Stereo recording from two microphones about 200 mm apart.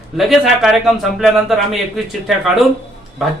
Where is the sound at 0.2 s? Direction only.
Centre (ahead or behind).